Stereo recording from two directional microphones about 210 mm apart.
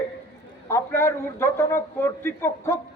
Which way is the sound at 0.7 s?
10° left (ahead or behind).